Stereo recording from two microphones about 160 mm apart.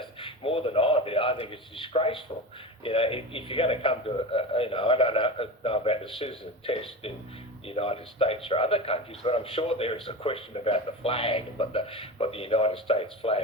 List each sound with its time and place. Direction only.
0.0 s a man's voice: 35° left (ahead or behind)